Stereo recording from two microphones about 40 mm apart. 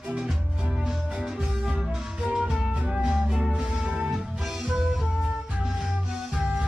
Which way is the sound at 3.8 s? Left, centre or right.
Right.